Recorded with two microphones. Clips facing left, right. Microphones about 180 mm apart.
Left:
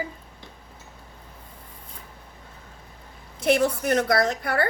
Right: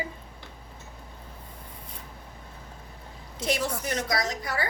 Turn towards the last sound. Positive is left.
turn(degrees=60)  # may be behind; listen again after turning